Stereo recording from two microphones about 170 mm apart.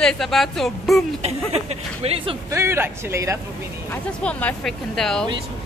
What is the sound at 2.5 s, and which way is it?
Speech, 15° right (ahead or behind).